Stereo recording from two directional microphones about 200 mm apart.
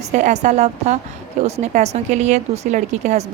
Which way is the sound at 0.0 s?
35° right (ahead or behind).